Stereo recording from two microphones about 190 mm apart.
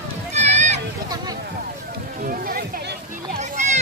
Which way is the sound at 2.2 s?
50° right (ahead or behind).